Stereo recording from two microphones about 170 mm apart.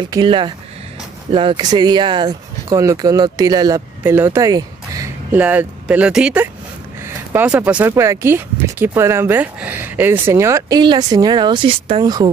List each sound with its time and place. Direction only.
0.0 s speech: 30° right (ahead or behind)
4.0 s a sound: 10° right (ahead or behind)
5.4 s speech: 10° right (ahead or behind)